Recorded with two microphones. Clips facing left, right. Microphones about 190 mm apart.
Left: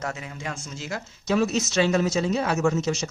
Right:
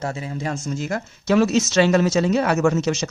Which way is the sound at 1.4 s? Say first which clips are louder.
Right 6 dB; 80° right.